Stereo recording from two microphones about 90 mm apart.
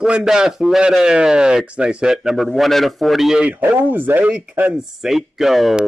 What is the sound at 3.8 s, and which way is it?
Speech, 20° right (ahead or behind).